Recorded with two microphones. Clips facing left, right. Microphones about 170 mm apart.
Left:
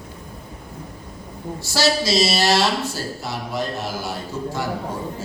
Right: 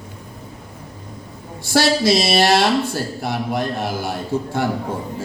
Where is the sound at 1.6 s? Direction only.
55° right (ahead or behind).